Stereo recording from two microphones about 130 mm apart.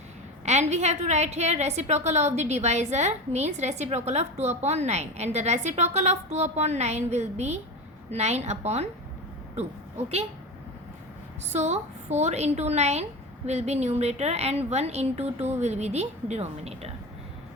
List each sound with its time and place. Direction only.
0.4 s a woman's voice: 60° right (ahead or behind)
11.5 s a woman's voice: 60° right (ahead or behind)